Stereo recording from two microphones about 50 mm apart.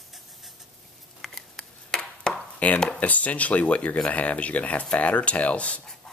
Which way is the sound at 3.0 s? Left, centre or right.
Left.